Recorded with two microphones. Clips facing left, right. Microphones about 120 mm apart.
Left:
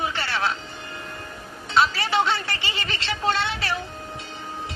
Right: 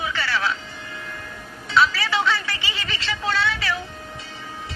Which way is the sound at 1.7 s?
55° left (ahead or behind).